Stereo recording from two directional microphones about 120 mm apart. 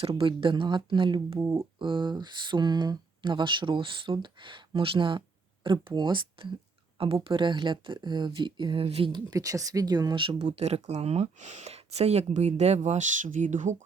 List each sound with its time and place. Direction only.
0.0 s speech: 45° right (ahead or behind)
1.4 s speech: 25° right (ahead or behind)
1.8 s speech: 40° right (ahead or behind)
9.1 s speech: 30° right (ahead or behind); by 10.4 s 45° right (ahead or behind)
10.5 s speech: 65° right (ahead or behind); by 13.7 s 90° right